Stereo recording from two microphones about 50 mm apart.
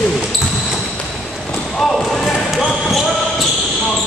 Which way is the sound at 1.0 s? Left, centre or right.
Left.